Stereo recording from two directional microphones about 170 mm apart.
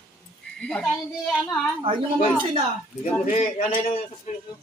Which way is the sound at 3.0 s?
45° left (ahead or behind).